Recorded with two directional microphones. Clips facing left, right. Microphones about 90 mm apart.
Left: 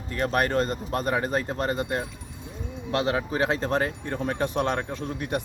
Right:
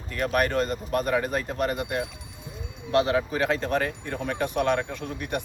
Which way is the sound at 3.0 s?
30° left (ahead or behind).